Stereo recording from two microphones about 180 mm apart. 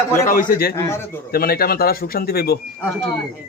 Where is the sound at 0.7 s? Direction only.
15° left (ahead or behind).